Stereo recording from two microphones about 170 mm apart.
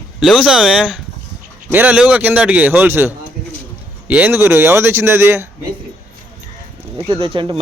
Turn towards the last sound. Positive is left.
turn(degrees=-30)  # may be behind; listen again after turning